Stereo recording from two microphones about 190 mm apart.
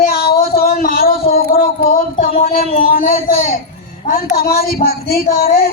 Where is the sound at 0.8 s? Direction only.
50° left (ahead or behind).